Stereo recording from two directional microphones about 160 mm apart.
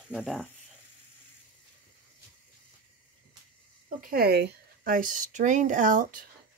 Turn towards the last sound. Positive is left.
turn(degrees=-55)  # may be behind; listen again after turning